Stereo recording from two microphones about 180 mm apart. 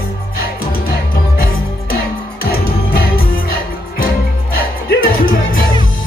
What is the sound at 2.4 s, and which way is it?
Music, 55° left (ahead or behind).